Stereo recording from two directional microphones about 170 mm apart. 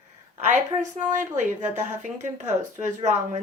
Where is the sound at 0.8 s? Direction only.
50° right (ahead or behind).